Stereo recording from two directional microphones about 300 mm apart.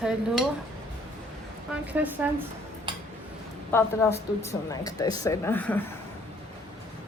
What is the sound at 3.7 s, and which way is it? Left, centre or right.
Speech, centre.